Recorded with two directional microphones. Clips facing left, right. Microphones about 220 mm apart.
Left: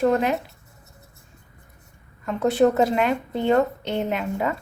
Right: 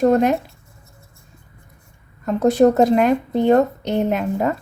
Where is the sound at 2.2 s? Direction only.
40° right (ahead or behind).